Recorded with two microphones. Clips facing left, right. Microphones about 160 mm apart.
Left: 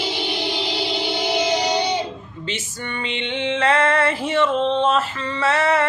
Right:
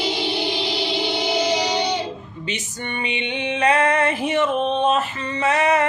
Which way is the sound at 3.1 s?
15° right (ahead or behind).